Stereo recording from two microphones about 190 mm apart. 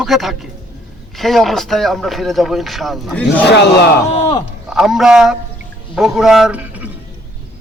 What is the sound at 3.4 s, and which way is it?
Speech, 60° left (ahead or behind).